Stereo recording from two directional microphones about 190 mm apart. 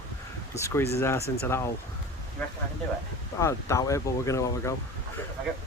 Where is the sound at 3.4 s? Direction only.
15° left (ahead or behind).